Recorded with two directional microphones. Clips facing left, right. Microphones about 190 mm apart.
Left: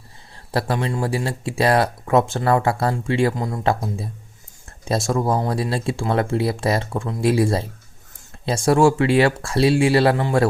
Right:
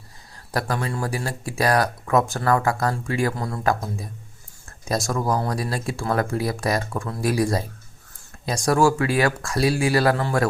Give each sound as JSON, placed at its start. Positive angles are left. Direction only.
{"t": 0.5, "sound": "speech", "side_deg": 25}